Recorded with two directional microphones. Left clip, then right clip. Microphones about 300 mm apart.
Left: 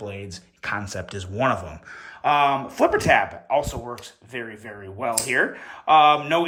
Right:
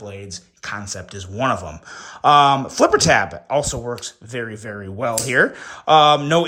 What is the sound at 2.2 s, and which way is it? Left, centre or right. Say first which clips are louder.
Speech: right 7 dB; centre.